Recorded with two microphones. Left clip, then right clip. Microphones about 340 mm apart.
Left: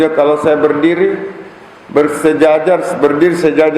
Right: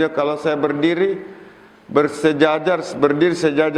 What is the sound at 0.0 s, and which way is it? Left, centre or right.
A man's voice, right.